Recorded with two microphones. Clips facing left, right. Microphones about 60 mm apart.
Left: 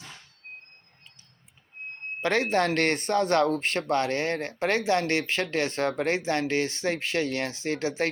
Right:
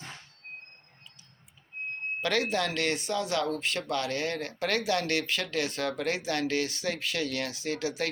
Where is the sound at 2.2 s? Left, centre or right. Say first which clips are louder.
Left 5 dB; left.